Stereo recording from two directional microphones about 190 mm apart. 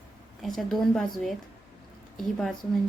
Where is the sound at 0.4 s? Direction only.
Centre (ahead or behind).